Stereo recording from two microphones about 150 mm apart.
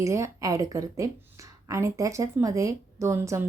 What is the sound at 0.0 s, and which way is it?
Speech, 20° right (ahead or behind).